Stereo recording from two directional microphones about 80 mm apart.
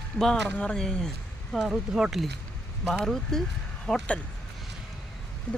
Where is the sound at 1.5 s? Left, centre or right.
Centre.